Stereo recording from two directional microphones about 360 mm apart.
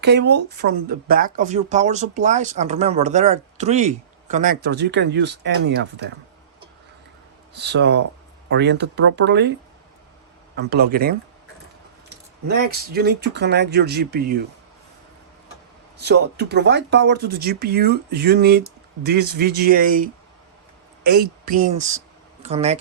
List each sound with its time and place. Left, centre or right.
0.0 s speech: right
7.5 s speech: right
12.5 s speech: right
16.0 s speech: right